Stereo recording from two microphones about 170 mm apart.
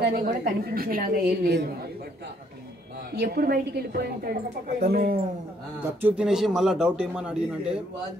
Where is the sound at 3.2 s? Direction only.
65° right (ahead or behind).